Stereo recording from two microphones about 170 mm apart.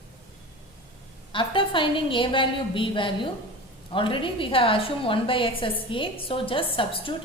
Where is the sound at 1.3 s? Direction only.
30° left (ahead or behind).